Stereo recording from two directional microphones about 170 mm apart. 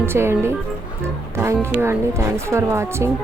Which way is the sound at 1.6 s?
15° right (ahead or behind).